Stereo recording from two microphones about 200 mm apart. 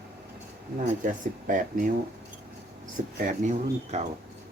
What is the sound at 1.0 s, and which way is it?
Speech, 40° right (ahead or behind).